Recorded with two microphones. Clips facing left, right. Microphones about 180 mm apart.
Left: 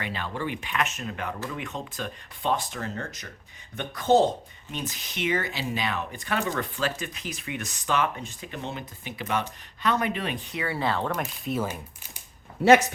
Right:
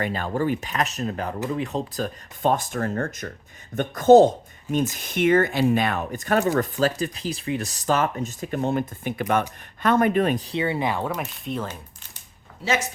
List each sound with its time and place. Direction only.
0.0 s speech: 45° right (ahead or behind); by 11.3 s 10° right (ahead or behind)
11.4 s speech: 5° left (ahead or behind)
12.6 s speech: 55° left (ahead or behind)